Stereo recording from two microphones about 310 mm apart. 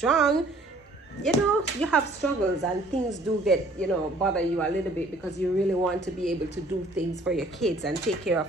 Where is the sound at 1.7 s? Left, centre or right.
Centre.